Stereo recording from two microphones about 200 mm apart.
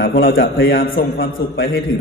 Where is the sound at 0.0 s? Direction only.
45° left (ahead or behind).